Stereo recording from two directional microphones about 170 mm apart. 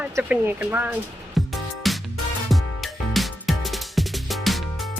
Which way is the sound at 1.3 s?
Centre (ahead or behind).